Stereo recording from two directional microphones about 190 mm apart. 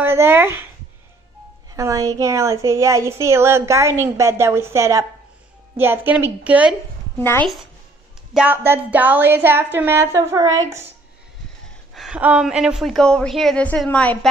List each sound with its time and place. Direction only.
0.0 s a woman's voice: 10° right (ahead or behind)
1.7 s a woman's voice: 20° right (ahead or behind)
8.3 s a woman's voice: 5° right (ahead or behind)
11.9 s a woman's voice: 5° right (ahead or behind)